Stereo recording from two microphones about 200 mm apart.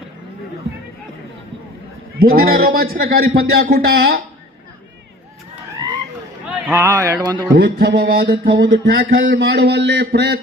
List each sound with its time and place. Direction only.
2.1 s a man's voice: 50° right (ahead or behind)
6.7 s speech: 10° right (ahead or behind)
7.5 s a man's voice: 45° right (ahead or behind)
7.9 s a man's voice: 60° right (ahead or behind)
8.9 s a man's voice: 45° right (ahead or behind)
9.1 s a man's voice: 65° right (ahead or behind)